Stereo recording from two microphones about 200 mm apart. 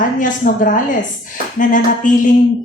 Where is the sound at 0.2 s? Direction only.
40° left (ahead or behind).